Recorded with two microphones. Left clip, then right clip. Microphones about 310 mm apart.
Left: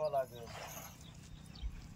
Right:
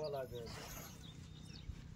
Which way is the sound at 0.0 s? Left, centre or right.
Centre.